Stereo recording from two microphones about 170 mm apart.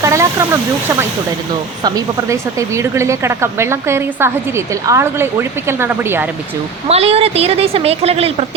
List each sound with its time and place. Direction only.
0.0 s speech: 15° right (ahead or behind)
6.8 s a woman's voice: 35° right (ahead or behind)